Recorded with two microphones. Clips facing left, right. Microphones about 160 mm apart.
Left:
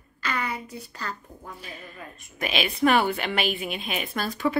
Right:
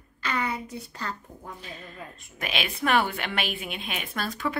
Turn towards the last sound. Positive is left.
turn(degrees=5)  # may be behind; listen again after turning